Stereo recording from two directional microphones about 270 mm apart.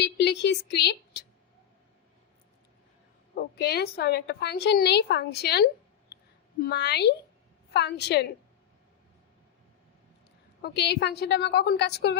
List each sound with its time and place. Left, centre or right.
0.0 s a woman's voice: left
3.3 s a woman's voice: left
10.6 s a woman's voice: left